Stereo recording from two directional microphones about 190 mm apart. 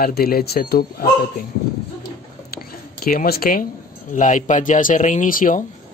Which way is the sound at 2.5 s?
50° left (ahead or behind).